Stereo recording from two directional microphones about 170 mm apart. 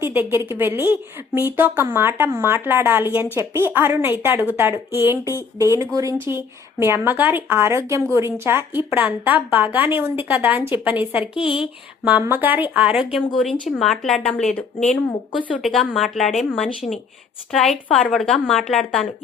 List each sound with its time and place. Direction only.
0.0 s a woman's voice: 10° right (ahead or behind)